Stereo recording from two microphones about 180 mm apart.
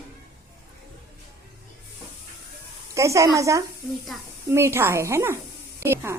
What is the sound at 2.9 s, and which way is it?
A woman's voice, 15° right (ahead or behind).